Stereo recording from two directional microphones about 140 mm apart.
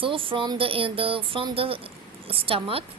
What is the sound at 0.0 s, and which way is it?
A woman's voice, 40° right (ahead or behind).